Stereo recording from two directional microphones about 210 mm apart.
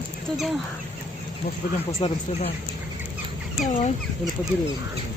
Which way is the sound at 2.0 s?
25° left (ahead or behind).